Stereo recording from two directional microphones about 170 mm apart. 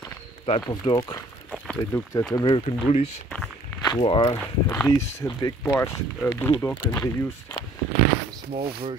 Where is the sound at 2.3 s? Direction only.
30° left (ahead or behind).